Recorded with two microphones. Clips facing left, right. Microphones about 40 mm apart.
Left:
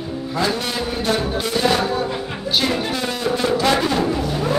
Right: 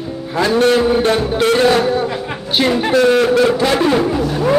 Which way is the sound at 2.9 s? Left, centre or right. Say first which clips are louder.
Right 11 dB; right.